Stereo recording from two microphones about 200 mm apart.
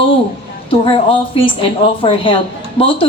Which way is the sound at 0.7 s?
25° left (ahead or behind).